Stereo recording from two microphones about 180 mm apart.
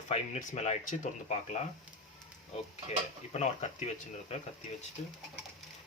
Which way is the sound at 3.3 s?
40° left (ahead or behind).